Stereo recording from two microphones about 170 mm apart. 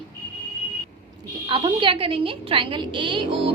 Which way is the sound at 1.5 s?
30° right (ahead or behind).